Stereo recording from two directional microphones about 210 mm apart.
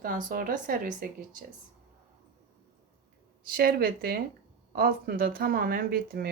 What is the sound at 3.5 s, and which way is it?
Speech, 45° right (ahead or behind).